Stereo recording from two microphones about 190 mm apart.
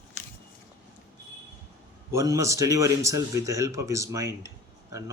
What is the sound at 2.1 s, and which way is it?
Speech, 15° right (ahead or behind).